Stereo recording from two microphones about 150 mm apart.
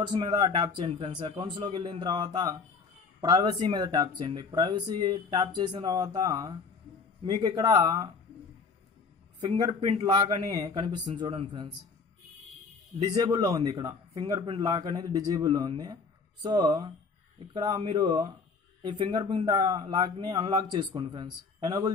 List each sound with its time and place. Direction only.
0.0 s speech: 30° right (ahead or behind)
9.6 s speech: 30° right (ahead or behind)
13.0 s speech: 25° right (ahead or behind)
21.6 s speech: 20° right (ahead or behind)